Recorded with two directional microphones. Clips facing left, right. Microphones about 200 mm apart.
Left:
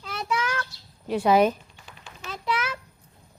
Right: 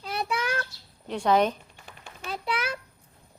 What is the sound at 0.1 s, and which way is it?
Child singing, 30° right (ahead or behind).